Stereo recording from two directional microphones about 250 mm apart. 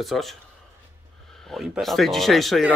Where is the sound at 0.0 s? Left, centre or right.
Centre.